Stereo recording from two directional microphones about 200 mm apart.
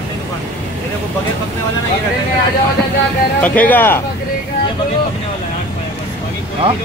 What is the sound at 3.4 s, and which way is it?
Speech, 10° left (ahead or behind).